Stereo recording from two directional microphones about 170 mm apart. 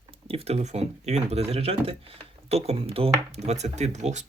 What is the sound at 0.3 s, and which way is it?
Speech, 35° right (ahead or behind).